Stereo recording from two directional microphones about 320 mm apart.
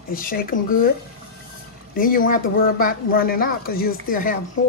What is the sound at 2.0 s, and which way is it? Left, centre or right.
Speech, left.